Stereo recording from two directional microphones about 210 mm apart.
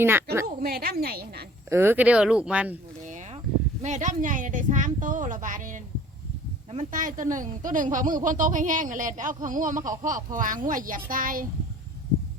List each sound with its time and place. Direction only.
0.0 s a woman's voice: 10° right (ahead or behind)
0.4 s a woman's voice: 45° right (ahead or behind)
1.7 s speech: 10° right (ahead or behind)
3.0 s a sound: 35° right (ahead or behind)
3.8 s speech: 35° right (ahead or behind)